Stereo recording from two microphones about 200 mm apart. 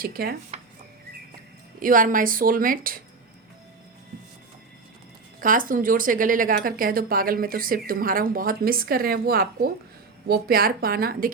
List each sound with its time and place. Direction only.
0.0 s speech: 50° right (ahead or behind)
1.8 s speech: 40° right (ahead or behind)
5.4 s speech: 45° right (ahead or behind)